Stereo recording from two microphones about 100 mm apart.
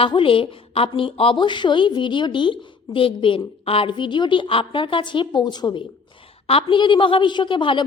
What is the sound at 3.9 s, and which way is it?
A woman's voice, 50° left (ahead or behind).